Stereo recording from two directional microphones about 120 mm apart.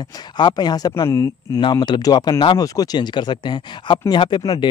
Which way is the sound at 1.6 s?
40° left (ahead or behind).